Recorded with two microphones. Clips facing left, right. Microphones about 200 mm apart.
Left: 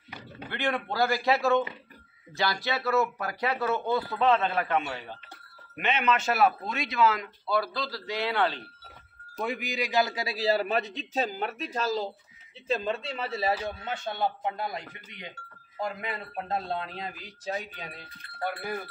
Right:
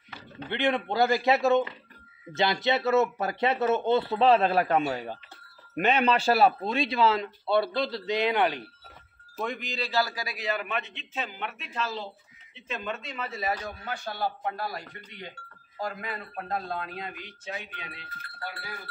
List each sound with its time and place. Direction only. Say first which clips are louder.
0.5 s speech: right 4 dB; 20° right (ahead or behind)
9.4 s a man's voice: left 2 dB; 10° left (ahead or behind); by 18.0 s 40° left (ahead or behind)
18.4 s speech: left 8 dB; 55° left (ahead or behind)